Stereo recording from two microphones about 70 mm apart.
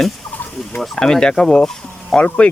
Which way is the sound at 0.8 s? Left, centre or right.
Centre.